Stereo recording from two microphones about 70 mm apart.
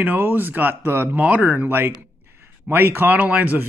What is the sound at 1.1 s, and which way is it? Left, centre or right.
Speech, right.